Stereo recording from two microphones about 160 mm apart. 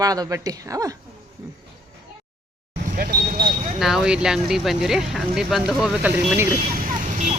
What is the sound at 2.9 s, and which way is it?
Vehicle, 70° right (ahead or behind).